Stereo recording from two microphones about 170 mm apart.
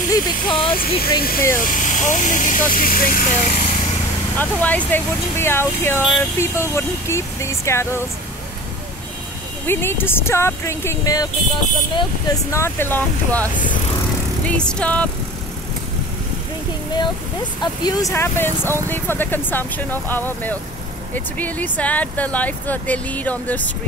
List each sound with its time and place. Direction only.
0.1 s speech: 30° left (ahead or behind)
0.7 s speech: 60° left (ahead or behind)
4.4 s speech: 10° left (ahead or behind)
9.7 s speech: 15° left (ahead or behind)
12.5 s speech: 15° left (ahead or behind)
17.6 s speech: 25° left (ahead or behind)